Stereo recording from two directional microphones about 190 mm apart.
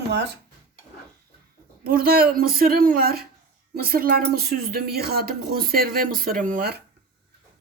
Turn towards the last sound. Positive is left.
turn(degrees=-50)  # may be behind; listen again after turning